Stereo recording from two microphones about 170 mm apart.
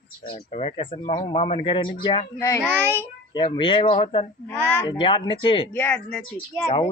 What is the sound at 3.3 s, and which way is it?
Speech, 30° left (ahead or behind).